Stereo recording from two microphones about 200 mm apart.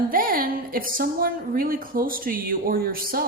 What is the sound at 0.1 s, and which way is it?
Speech, 45° right (ahead or behind).